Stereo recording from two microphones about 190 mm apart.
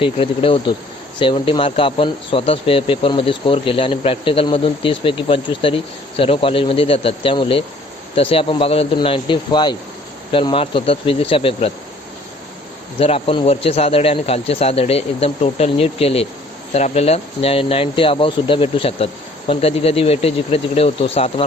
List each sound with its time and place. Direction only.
0.0 s speech: 30° left (ahead or behind)
13.0 s speech: 30° left (ahead or behind)